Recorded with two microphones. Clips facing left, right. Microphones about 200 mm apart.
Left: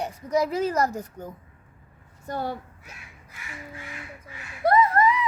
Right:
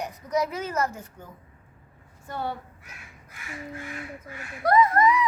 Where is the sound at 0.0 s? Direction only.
30° left (ahead or behind).